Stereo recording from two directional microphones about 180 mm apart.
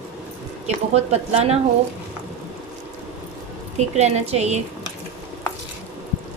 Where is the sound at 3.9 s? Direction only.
35° right (ahead or behind).